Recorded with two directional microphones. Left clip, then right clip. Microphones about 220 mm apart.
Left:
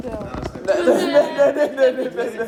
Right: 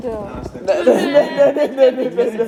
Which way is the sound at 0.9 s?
45° right (ahead or behind).